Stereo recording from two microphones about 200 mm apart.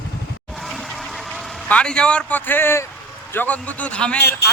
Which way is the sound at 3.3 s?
10° left (ahead or behind).